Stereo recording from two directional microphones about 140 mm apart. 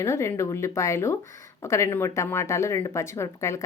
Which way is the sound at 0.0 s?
20° left (ahead or behind).